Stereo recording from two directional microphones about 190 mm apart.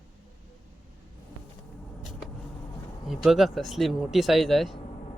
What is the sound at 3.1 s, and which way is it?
Speech, centre (ahead or behind).